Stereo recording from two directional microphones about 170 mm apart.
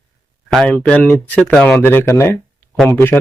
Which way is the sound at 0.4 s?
5° left (ahead or behind).